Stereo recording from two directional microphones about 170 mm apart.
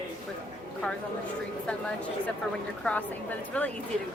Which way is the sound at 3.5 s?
5° left (ahead or behind).